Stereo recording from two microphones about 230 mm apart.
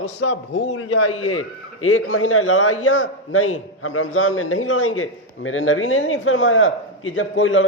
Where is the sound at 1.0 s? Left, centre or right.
Left.